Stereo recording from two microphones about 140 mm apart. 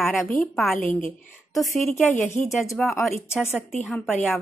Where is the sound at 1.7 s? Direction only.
15° left (ahead or behind).